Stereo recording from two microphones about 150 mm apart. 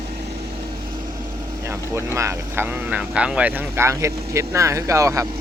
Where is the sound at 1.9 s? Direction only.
15° right (ahead or behind).